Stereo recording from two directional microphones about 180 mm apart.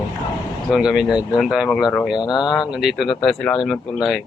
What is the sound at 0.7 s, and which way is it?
Speech, 5° right (ahead or behind).